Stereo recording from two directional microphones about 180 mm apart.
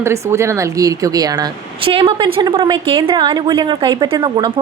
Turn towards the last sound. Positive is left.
turn(degrees=-25)  # may be behind; listen again after turning